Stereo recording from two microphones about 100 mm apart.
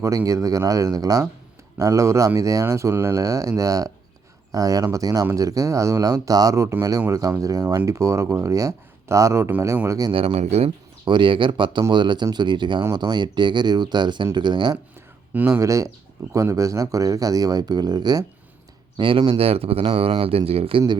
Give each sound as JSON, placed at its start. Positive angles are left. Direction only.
{"t": 0.3, "sound": "speech", "side_deg": -35}
{"t": 10.1, "sound": "speech", "side_deg": -65}
{"t": 11.0, "sound": "speech", "side_deg": -55}
{"t": 15.3, "sound": "speech", "side_deg": -20}
{"t": 18.9, "sound": "speech", "side_deg": -60}
{"t": 19.3, "sound": "speech", "side_deg": -75}